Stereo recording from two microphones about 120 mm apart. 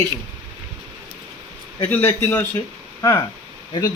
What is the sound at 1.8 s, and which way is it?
Speech, 15° left (ahead or behind).